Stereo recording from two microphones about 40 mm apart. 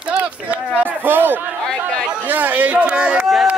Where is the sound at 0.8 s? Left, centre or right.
Right.